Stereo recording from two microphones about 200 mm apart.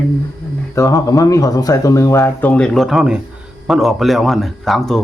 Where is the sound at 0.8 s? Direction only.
15° left (ahead or behind).